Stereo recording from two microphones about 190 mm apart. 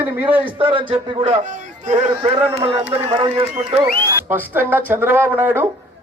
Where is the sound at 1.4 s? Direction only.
40° right (ahead or behind).